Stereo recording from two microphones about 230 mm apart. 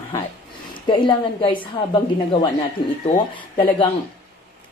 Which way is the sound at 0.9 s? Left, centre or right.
Left.